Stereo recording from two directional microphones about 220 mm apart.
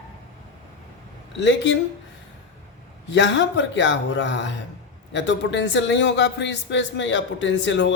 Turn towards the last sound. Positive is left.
turn(degrees=55)  # may be behind; listen again after turning